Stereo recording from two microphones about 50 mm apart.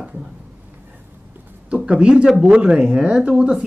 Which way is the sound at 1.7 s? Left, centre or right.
Right.